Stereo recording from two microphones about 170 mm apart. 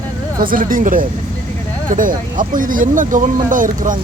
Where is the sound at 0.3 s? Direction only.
55° right (ahead or behind).